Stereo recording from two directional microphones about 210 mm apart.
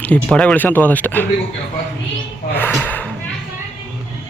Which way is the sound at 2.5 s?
10° left (ahead or behind).